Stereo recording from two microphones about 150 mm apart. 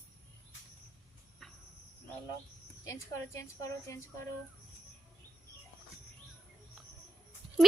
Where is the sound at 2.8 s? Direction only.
20° left (ahead or behind).